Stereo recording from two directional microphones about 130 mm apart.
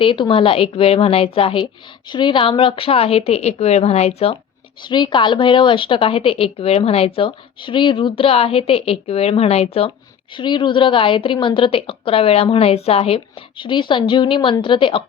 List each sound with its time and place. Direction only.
0.0 s a woman's voice: 40° left (ahead or behind)
4.8 s a woman's voice: 35° left (ahead or behind)
10.3 s a woman's voice: 40° left (ahead or behind)